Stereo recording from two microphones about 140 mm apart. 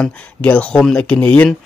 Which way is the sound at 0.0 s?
10° left (ahead or behind).